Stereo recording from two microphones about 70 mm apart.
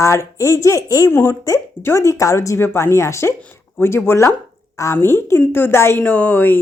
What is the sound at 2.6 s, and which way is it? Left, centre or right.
Speech, left.